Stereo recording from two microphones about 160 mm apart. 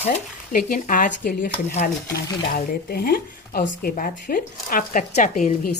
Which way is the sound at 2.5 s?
70° left (ahead or behind).